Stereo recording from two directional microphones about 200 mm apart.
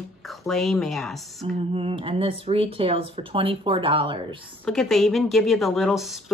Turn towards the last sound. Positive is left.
turn(degrees=0)  # may be behind; listen again after turning